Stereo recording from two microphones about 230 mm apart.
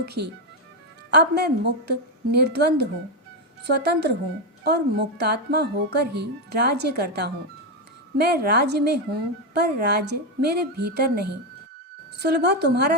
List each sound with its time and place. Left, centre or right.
0.0 s a woman's voice: right